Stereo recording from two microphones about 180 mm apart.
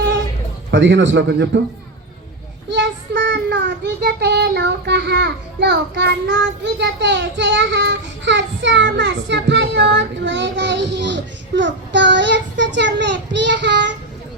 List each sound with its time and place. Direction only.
0.7 s a man's voice: 90° right; by 1.6 s 70° right (ahead or behind)
2.6 s a child's voice: 75° right (ahead or behind)